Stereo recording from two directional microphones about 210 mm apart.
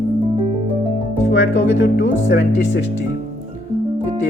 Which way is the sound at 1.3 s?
60° left (ahead or behind).